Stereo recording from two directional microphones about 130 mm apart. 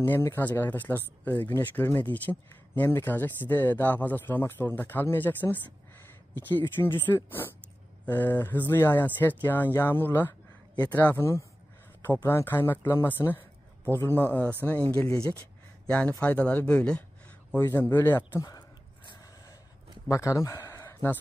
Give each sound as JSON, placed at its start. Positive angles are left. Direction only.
{"t": 0.0, "sound": "speech", "side_deg": 15}
{"t": 17.6, "sound": "speech", "side_deg": 25}
{"t": 20.1, "sound": "speech", "side_deg": 25}